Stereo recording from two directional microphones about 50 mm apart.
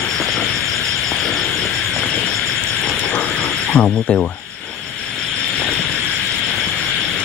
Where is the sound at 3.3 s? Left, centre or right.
Centre.